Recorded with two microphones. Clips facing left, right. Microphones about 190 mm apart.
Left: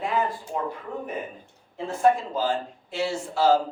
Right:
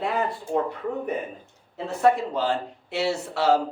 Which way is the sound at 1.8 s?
70° right (ahead or behind).